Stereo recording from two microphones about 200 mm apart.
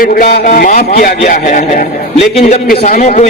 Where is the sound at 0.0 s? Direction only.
45° left (ahead or behind).